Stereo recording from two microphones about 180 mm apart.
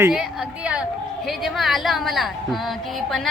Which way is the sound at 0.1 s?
5° right (ahead or behind).